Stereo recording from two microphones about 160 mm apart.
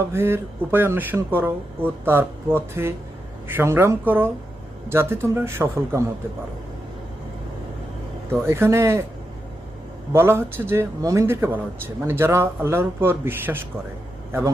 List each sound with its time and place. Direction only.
0.1 s speech: 15° right (ahead or behind)
8.4 s speech: 15° right (ahead or behind)
10.1 s speech: 15° right (ahead or behind)